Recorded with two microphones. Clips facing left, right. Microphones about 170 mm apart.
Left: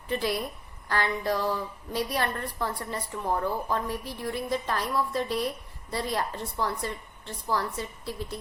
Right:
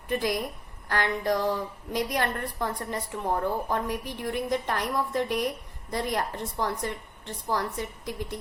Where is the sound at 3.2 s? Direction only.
50° right (ahead or behind).